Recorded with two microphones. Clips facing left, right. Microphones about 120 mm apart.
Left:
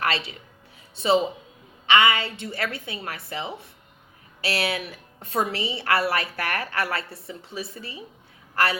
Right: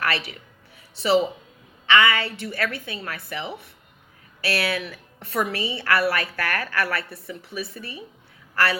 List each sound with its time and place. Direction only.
0.0 s a woman's voice: 25° left (ahead or behind)